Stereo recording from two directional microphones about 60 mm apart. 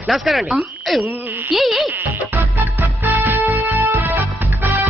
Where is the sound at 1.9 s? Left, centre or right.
Right.